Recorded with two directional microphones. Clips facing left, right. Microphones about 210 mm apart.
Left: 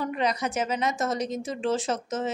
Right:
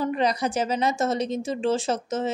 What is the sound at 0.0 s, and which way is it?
A woman's voice, 35° right (ahead or behind).